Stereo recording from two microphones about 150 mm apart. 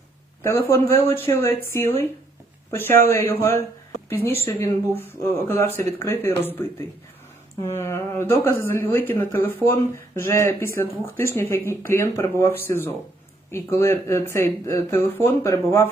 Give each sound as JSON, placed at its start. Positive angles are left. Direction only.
{"t": 0.4, "sound": "speech", "side_deg": 20}
{"t": 5.5, "sound": "speech", "side_deg": 15}